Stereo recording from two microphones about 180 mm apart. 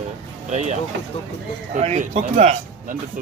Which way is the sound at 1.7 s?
40° right (ahead or behind).